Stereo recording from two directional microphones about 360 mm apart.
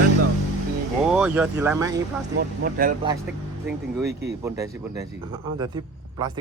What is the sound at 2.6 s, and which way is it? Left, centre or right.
Speech, right.